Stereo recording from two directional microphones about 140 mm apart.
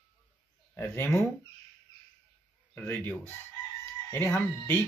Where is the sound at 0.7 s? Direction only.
15° left (ahead or behind).